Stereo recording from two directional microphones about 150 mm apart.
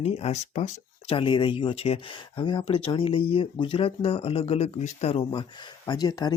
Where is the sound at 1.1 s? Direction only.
35° left (ahead or behind).